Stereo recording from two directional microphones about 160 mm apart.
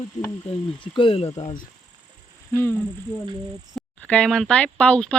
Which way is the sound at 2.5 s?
10° left (ahead or behind).